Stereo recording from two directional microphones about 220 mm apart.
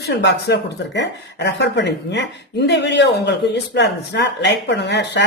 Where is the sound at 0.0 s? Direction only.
50° left (ahead or behind).